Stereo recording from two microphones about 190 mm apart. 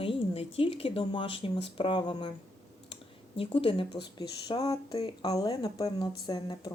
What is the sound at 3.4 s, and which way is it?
A woman's voice, 25° left (ahead or behind).